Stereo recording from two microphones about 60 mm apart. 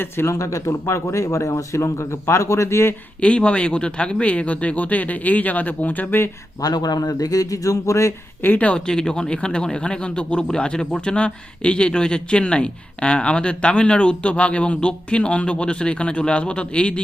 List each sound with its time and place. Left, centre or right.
0.3 s speech: left
3.2 s speech: left
6.6 s a man's voice: left
8.4 s speech: left
8.7 s speech: centre